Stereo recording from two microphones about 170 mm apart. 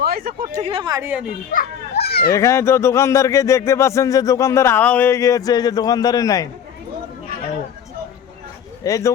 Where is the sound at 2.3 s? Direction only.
15° left (ahead or behind).